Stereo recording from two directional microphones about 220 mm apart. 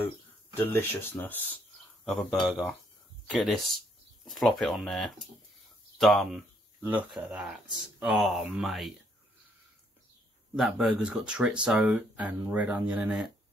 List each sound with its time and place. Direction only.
0.6 s speech: 10° left (ahead or behind)
10.5 s speech: 5° right (ahead or behind)